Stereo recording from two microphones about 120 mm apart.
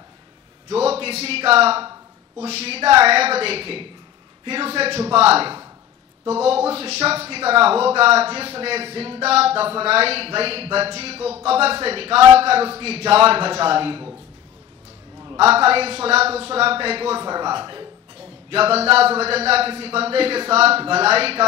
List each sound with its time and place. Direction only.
0.7 s speech: 60° right (ahead or behind)
15.3 s speech: 55° right (ahead or behind); by 17.8 s 40° right (ahead or behind)
18.5 s speech: 55° right (ahead or behind)